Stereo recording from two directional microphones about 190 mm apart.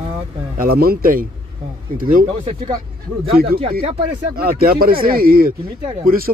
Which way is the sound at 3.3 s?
50° right (ahead or behind).